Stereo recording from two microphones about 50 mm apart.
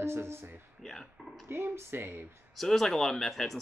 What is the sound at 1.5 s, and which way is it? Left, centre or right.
Speech, right.